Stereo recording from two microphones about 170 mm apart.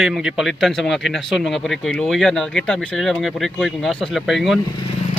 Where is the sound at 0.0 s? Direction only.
Centre (ahead or behind).